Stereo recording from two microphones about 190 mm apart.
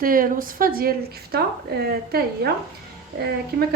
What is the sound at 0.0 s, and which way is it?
A woman's voice, 45° right (ahead or behind).